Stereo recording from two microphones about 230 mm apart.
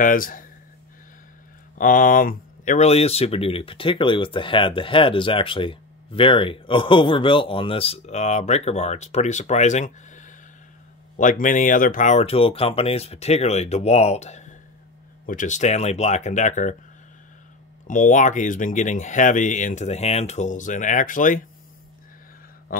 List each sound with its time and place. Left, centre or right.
0.0 s speech: left
1.8 s speech: left
17.8 s speech: left